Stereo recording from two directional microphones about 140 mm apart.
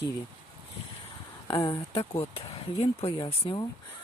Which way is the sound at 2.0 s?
45° left (ahead or behind).